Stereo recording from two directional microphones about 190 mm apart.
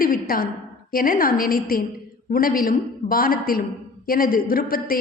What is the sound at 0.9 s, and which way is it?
A woman's voice, 50° left (ahead or behind).